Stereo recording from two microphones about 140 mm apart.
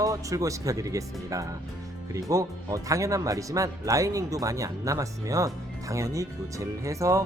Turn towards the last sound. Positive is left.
turn(degrees=-20)  # may be behind; listen again after turning